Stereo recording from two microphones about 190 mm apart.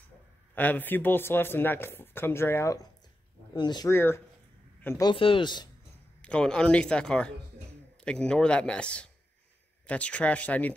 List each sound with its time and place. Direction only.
0.6 s speech: 10° left (ahead or behind)
5.1 s speech: 25° left (ahead or behind)
6.2 s speech: 5° left (ahead or behind)